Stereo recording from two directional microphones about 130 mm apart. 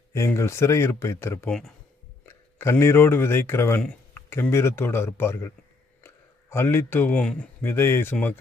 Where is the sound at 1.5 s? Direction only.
5° left (ahead or behind).